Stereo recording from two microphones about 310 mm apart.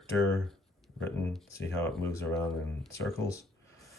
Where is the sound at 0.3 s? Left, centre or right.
Centre.